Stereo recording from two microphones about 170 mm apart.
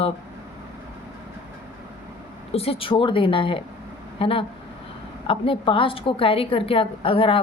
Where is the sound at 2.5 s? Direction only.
35° left (ahead or behind).